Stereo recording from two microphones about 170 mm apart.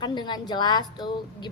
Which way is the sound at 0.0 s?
25° left (ahead or behind).